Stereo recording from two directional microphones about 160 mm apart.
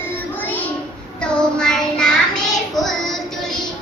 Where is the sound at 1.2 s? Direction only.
5° left (ahead or behind).